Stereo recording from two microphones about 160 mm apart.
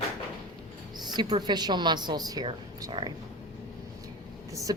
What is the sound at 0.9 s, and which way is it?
A woman's voice, 25° right (ahead or behind).